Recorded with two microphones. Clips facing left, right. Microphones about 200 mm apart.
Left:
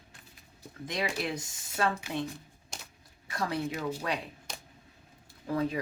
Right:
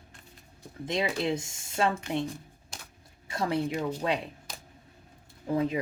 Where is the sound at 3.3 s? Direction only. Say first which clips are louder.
Right 4 dB; 25° right (ahead or behind).